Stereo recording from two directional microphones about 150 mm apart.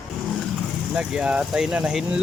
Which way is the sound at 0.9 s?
5° right (ahead or behind).